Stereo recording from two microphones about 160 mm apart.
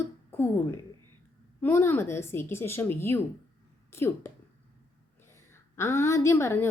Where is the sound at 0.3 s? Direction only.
15° left (ahead or behind).